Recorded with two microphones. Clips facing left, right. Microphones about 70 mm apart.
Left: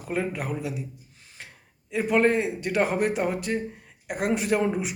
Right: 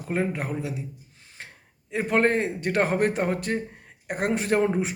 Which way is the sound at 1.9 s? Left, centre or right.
Right.